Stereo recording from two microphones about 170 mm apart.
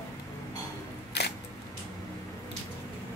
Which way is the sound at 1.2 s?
90° left.